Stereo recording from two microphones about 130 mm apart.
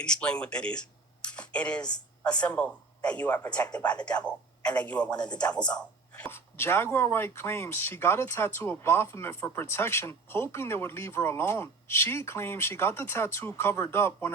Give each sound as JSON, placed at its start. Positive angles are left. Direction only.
{"t": 0.0, "sound": "speech", "side_deg": 5}